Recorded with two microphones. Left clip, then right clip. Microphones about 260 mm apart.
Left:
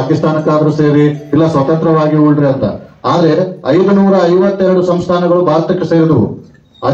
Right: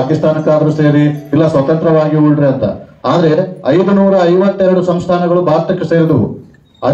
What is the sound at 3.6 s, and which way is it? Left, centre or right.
A man's voice, right.